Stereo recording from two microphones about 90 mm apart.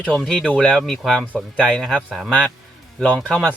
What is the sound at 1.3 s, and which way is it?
Speech, 15° right (ahead or behind).